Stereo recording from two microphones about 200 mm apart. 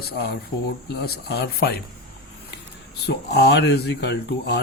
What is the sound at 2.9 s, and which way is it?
Speech, 55° left (ahead or behind).